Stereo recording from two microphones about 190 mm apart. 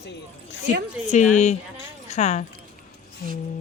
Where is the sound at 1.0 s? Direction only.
40° left (ahead or behind).